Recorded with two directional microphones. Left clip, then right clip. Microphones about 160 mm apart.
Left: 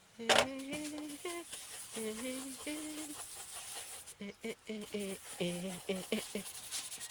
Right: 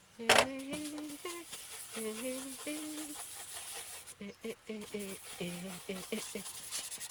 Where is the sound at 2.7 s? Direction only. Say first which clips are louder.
Right 1 dB; 30° left (ahead or behind).